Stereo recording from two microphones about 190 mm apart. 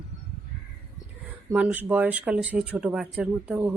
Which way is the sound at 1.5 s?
5° right (ahead or behind).